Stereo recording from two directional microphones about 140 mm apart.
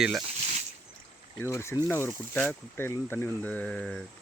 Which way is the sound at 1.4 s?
20° left (ahead or behind).